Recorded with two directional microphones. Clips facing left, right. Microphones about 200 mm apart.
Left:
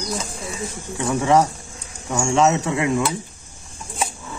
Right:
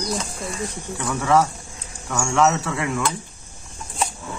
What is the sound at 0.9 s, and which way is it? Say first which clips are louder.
Speech: left 2 dB; 20° left (ahead or behind).